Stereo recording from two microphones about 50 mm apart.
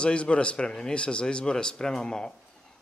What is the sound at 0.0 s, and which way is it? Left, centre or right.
Speech, left.